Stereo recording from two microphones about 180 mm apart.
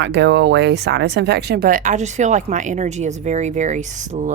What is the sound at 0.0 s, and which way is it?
Speech, 75° right (ahead or behind).